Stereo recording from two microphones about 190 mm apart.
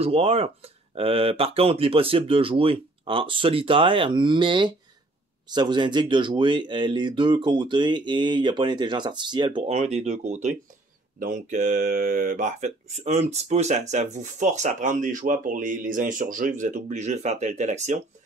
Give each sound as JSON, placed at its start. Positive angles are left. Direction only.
{"t": 0.0, "sound": "speech", "side_deg": -30}